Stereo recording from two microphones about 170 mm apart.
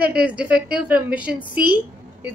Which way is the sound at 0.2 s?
10° right (ahead or behind).